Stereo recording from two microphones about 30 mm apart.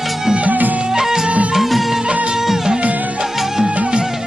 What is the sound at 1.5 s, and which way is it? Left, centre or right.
Music, centre.